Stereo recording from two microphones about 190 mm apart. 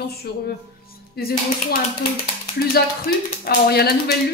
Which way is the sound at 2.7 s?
50° left (ahead or behind).